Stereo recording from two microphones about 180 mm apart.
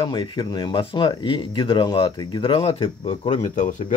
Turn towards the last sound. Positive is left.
turn(degrees=45)  # may be behind; listen again after turning